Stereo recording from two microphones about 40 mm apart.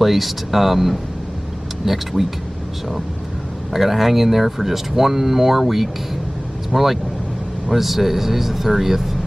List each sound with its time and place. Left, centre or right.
0.0 s speech: centre
3.7 s speech: centre